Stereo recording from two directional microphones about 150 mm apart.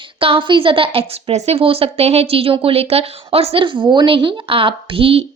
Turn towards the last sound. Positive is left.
turn(degrees=-40)  # may be behind; listen again after turning